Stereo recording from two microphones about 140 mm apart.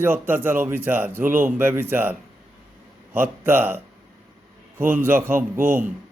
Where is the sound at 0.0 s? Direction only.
15° right (ahead or behind).